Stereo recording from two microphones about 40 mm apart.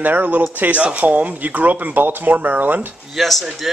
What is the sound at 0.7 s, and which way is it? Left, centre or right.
Speech, right.